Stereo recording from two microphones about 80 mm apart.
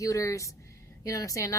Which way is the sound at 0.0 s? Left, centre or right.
Left.